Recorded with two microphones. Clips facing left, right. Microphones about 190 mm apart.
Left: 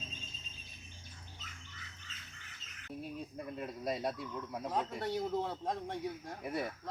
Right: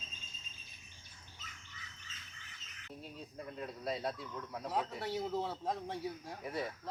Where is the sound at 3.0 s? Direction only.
10° left (ahead or behind).